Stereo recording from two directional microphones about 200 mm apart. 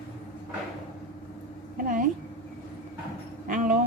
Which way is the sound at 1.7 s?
45° right (ahead or behind).